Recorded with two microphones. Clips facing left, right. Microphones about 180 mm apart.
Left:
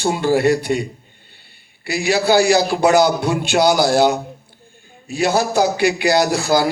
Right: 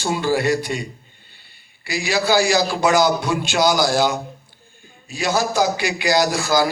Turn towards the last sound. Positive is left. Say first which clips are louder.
# left 2 dB
turn(degrees=30)  # may be behind; listen again after turning